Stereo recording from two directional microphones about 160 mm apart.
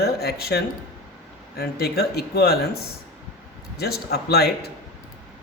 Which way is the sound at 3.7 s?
80° left.